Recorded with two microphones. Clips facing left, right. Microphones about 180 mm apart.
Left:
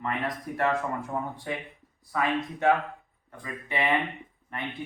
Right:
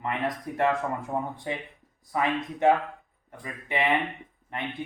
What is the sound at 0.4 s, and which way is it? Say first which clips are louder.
Speech: right 1 dB; 20° right (ahead or behind).